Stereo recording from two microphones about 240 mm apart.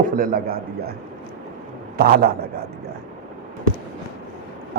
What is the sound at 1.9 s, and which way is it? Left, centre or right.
Speech, right.